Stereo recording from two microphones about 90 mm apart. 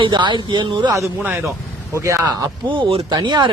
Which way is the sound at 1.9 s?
35° right (ahead or behind).